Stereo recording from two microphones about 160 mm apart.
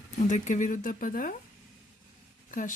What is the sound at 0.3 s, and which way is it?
Speech, 50° left (ahead or behind).